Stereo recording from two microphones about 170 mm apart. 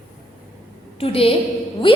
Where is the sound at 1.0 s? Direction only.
35° left (ahead or behind).